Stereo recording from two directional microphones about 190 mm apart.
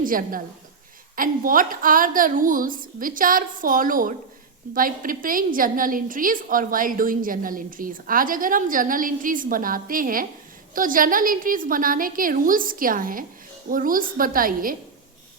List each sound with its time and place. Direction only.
0.0 s a woman's voice: 45° right (ahead or behind)